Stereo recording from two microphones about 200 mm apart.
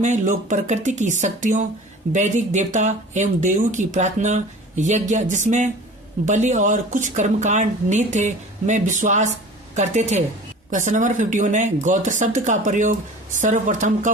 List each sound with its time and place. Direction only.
0.0 s speech: 40° right (ahead or behind)